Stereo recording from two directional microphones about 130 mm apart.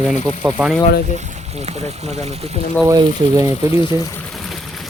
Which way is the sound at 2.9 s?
25° right (ahead or behind).